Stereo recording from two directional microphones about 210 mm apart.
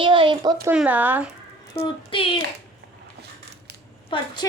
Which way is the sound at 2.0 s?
25° left (ahead or behind).